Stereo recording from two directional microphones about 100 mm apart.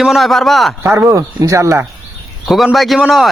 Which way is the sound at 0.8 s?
25° right (ahead or behind).